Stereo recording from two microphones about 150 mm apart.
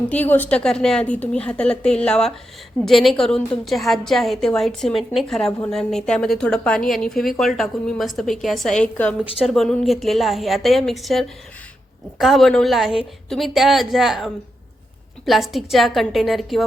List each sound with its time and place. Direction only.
0.1 s a woman's voice: 10° left (ahead or behind)
5.5 s a woman's voice: 20° left (ahead or behind)
5.7 s a woman's voice: 5° left (ahead or behind)